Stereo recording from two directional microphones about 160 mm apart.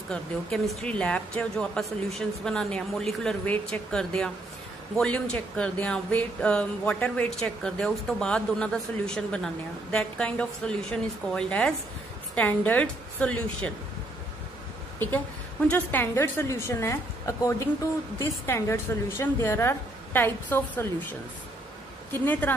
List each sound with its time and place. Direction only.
0.1 s a woman's voice: centre (ahead or behind)
15.7 s a woman's voice: 10° left (ahead or behind)
22.1 s a woman's voice: 10° left (ahead or behind)